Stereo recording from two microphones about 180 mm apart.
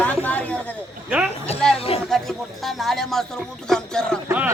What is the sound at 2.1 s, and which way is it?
Speech, centre (ahead or behind).